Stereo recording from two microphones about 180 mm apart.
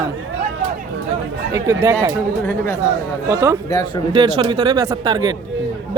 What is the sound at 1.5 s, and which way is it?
Speech, 15° right (ahead or behind).